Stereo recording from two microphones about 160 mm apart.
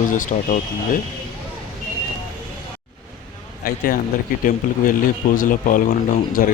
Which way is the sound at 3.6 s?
60° left (ahead or behind).